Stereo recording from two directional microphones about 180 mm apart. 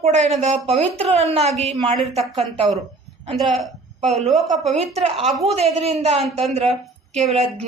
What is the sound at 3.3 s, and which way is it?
Speech, centre (ahead or behind).